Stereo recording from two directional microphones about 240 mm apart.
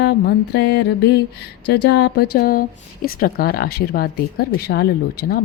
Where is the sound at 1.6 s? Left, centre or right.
Left.